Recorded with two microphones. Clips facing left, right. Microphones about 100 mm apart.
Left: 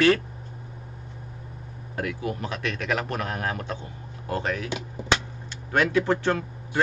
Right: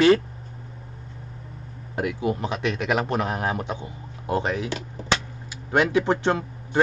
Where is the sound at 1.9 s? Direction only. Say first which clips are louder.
Right 4 dB; 20° right (ahead or behind).